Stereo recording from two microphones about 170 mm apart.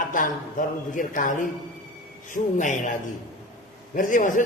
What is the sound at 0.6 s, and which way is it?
A man's voice, 50° left (ahead or behind).